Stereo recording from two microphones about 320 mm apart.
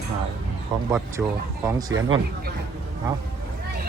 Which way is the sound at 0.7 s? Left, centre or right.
Centre.